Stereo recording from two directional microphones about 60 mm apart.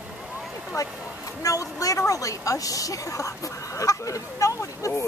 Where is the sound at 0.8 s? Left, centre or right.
Left.